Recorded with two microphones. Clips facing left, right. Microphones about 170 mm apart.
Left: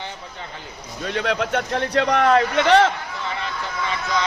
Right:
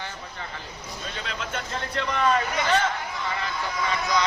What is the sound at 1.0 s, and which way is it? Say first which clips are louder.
A man's voice: left 13 dB; 65° left (ahead or behind).